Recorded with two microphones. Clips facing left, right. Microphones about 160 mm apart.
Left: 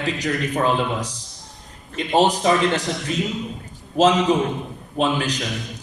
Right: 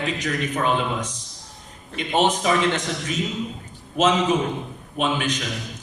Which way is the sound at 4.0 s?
30° left (ahead or behind).